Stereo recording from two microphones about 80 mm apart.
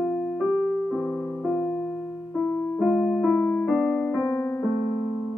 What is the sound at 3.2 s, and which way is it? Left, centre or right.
Keyboard, centre.